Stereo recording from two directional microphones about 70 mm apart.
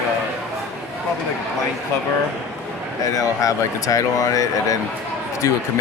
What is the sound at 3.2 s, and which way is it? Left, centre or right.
Speech, left.